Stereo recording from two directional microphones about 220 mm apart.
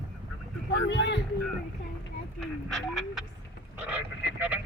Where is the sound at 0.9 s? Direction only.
55° left (ahead or behind).